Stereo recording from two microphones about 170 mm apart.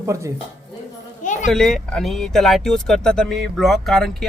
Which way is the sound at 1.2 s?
45° left (ahead or behind).